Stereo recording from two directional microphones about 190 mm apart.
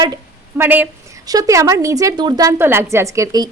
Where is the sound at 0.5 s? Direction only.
10° right (ahead or behind).